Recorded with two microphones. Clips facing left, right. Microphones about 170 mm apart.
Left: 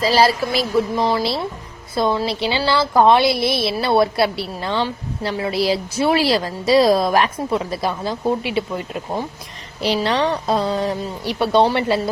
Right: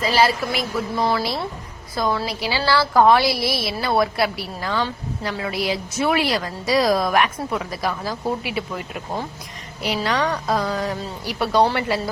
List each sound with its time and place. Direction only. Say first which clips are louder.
0.0 s speech: left 3 dB; 35° left (ahead or behind)
0.9 s speech: left 2 dB; 15° left (ahead or behind)
2.0 s speech: left 4 dB; 25° left (ahead or behind)